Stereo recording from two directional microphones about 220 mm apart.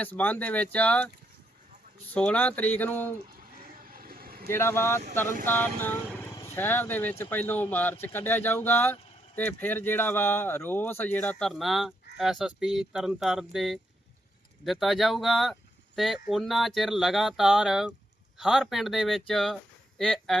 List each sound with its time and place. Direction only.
0.0 s speech: 10° left (ahead or behind)
3.3 s vehicle: 40° right (ahead or behind)
4.4 s speech: 10° left (ahead or behind)